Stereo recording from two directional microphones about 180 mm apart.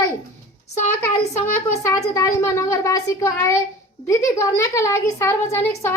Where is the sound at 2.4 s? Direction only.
15° left (ahead or behind).